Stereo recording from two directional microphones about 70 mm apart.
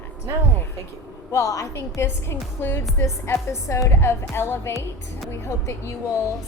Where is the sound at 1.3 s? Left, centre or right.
Left.